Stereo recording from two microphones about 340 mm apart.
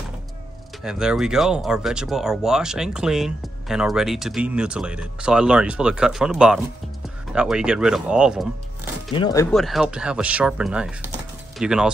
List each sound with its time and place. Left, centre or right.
0.8 s speech: centre
9.1 s speech: centre